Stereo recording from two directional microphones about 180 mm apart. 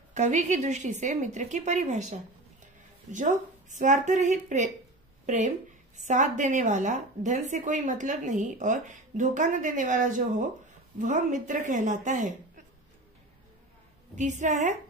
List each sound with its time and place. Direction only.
0.1 s a woman's voice: 40° right (ahead or behind)
14.1 s a woman's voice: 40° right (ahead or behind)